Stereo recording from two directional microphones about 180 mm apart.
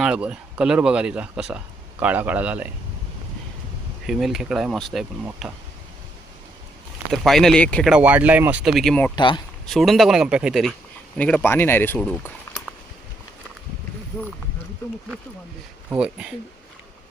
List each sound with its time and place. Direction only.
0.0 s speech: 5° right (ahead or behind)
4.0 s speech: centre (ahead or behind)
7.1 s speech: centre (ahead or behind)
7.9 s speech: 5° right (ahead or behind)
9.1 s speech: 25° left (ahead or behind)
9.6 s speech: centre (ahead or behind)
15.9 s speech: 5° right (ahead or behind)